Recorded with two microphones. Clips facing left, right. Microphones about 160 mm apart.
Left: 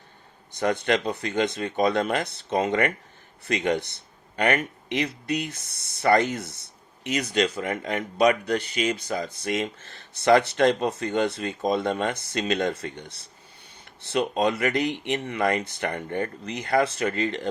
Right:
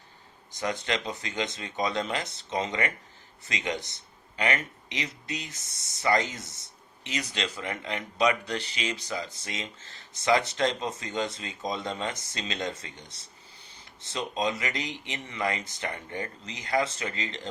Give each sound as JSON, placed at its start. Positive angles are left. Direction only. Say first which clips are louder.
{"t": 0.5, "sound": "speech", "louder": "left 7 dB", "side_deg": 60}